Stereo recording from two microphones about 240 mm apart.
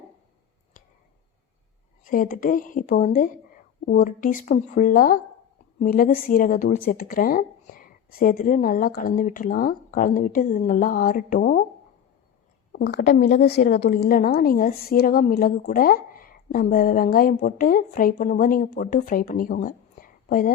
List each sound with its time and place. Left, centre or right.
2.0 s a woman's voice: left
12.7 s a woman's voice: left